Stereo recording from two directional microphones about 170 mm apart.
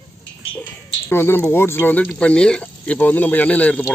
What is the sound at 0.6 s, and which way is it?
Speech, 15° left (ahead or behind).